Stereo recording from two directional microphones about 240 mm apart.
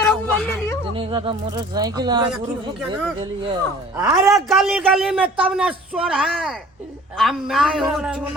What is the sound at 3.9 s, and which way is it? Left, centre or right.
Speech, centre.